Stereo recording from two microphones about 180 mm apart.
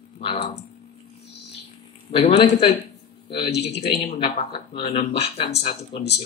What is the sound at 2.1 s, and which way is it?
Speech, 35° left (ahead or behind).